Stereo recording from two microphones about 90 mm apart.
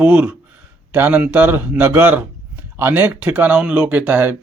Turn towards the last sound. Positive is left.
turn(degrees=-20)  # may be behind; listen again after turning